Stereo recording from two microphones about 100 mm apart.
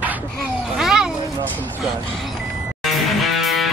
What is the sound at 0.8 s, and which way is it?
Children playing, 5° right (ahead or behind).